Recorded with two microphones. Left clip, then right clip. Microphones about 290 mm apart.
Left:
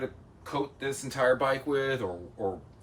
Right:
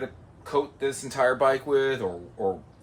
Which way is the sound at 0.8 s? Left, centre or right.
Centre.